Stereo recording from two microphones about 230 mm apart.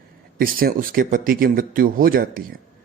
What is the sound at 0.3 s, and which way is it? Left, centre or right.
Speech, right.